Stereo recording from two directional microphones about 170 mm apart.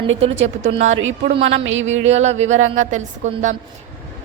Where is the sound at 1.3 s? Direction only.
90° right.